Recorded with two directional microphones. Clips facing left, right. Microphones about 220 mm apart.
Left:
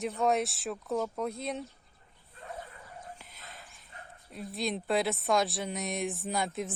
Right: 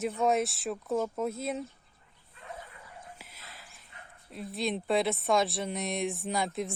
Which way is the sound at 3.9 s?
35° left (ahead or behind).